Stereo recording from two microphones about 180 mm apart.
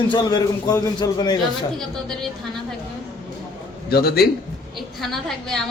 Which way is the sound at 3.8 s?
60° left (ahead or behind).